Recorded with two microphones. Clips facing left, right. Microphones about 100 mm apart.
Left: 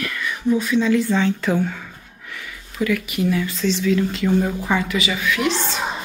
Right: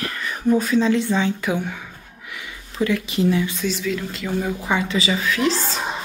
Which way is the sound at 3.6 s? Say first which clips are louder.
Left 5 dB; 5° right (ahead or behind).